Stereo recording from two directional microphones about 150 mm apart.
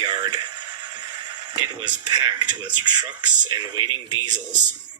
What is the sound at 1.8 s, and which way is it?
Speech, 30° right (ahead or behind).